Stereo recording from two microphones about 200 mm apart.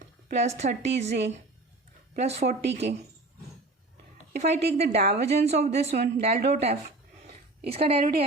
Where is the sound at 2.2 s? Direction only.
35° right (ahead or behind).